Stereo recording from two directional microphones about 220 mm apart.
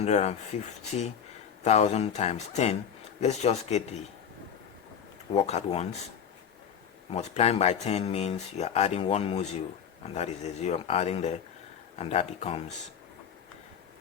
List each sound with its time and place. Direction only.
0.0 s speech: 30° left (ahead or behind)
5.3 s speech: 30° left (ahead or behind)
7.1 s speech: 30° left (ahead or behind)